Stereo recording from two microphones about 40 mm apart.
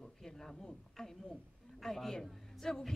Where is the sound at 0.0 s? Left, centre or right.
Centre.